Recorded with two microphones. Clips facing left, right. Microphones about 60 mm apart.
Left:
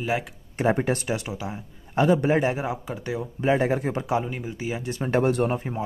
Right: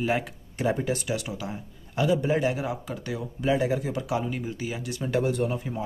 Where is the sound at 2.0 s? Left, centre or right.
Left.